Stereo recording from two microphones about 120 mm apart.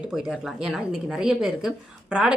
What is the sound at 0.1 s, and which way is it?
Speech, centre (ahead or behind).